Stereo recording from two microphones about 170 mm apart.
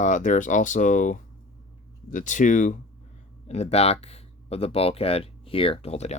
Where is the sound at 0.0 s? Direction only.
45° left (ahead or behind).